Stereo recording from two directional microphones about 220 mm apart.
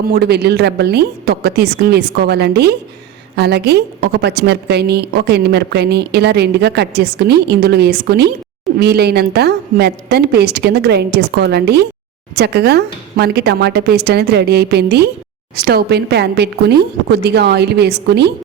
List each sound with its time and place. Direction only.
0.1 s a woman's voice: 45° right (ahead or behind)